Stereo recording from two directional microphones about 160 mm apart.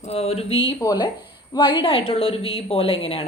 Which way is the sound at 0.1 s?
40° left (ahead or behind).